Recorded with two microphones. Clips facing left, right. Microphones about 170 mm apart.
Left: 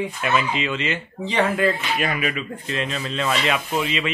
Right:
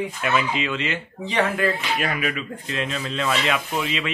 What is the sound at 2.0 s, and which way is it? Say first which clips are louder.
Speech: left 1 dB; 10° left (ahead or behind).